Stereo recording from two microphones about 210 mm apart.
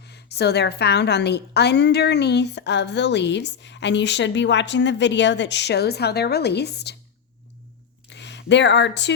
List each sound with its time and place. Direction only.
0.1 s a woman's voice: 50° left (ahead or behind)
8.1 s speech: 55° left (ahead or behind)